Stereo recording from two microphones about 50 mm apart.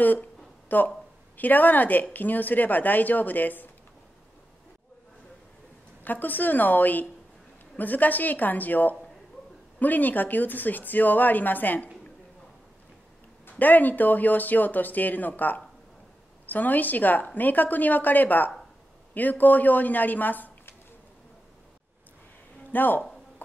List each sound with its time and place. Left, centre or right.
0.0 s speech: left
6.0 s speech: left
13.5 s speech: left
22.7 s speech: left